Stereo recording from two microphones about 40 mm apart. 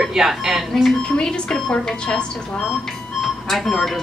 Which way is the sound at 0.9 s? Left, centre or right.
Centre.